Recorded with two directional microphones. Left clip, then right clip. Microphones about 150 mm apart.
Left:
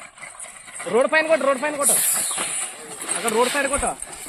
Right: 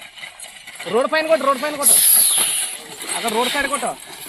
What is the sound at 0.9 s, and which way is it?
Speech, 90° right.